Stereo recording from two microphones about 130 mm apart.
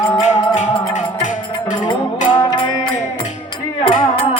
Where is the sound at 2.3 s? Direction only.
35° left (ahead or behind).